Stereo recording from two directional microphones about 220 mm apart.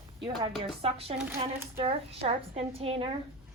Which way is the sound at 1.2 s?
10° right (ahead or behind).